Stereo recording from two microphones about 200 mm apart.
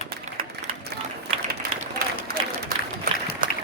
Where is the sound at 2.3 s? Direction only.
50° right (ahead or behind).